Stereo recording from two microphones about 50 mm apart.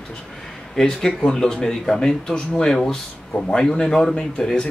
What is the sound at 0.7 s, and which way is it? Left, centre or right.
Speech, centre.